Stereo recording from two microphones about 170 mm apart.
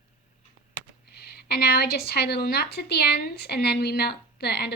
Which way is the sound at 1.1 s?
70° left (ahead or behind).